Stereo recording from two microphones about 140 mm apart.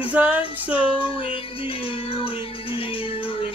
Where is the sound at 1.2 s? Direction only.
40° left (ahead or behind).